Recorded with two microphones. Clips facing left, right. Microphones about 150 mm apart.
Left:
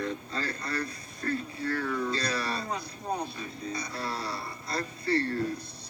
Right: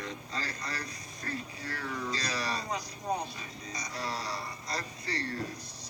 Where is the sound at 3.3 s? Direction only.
55° left (ahead or behind).